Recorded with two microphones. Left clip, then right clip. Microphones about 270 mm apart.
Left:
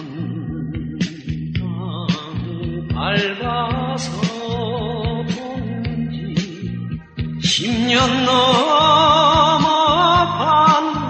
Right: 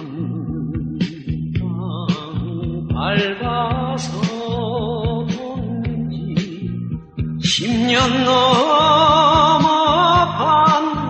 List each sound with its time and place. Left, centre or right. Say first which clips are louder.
3.0 s music: even; left
7.4 s music: even; left